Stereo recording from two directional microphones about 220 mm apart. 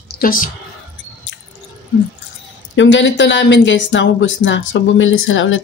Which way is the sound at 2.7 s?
55° left (ahead or behind).